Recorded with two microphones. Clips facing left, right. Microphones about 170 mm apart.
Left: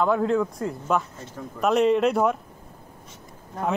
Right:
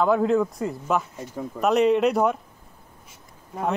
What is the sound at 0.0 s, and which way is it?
Speech, 5° right (ahead or behind).